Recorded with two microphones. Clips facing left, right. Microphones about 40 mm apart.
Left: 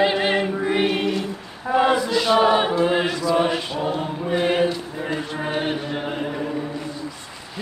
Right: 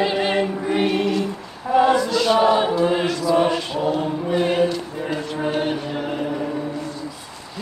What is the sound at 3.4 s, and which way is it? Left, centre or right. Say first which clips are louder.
Chant: right 2 dB; centre.